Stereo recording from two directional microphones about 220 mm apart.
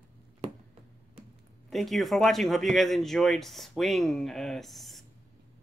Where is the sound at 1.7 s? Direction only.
Centre (ahead or behind).